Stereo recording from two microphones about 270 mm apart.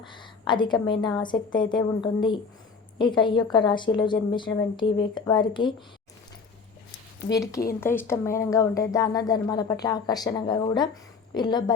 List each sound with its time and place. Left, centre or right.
0.0 s a woman's voice: centre
7.3 s a woman's voice: centre